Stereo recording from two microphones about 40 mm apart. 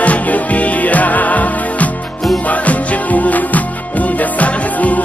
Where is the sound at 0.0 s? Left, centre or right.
Left.